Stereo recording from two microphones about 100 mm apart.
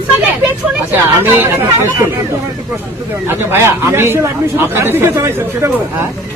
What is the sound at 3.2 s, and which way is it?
Speech, 25° right (ahead or behind).